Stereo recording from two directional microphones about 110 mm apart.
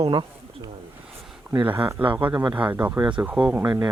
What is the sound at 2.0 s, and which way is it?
Speech, 55° right (ahead or behind).